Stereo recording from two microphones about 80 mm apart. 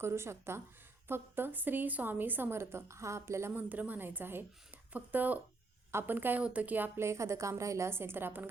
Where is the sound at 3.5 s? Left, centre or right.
Right.